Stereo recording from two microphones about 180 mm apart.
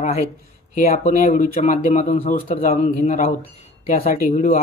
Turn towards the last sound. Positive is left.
turn(degrees=40)  # may be behind; listen again after turning